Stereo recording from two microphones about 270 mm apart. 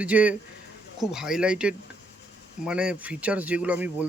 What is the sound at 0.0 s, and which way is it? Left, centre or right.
Speech, centre.